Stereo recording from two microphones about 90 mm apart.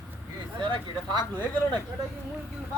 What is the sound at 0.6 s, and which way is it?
Speech, 65° right (ahead or behind).